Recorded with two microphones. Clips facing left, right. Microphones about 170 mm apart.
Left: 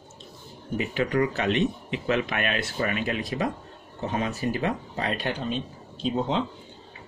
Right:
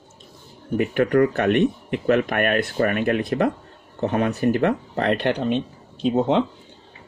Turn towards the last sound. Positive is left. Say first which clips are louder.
# right 7 dB
turn(degrees=-65)  # may be behind; listen again after turning